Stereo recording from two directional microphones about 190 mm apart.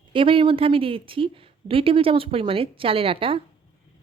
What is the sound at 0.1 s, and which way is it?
A woman's voice, 30° right (ahead or behind).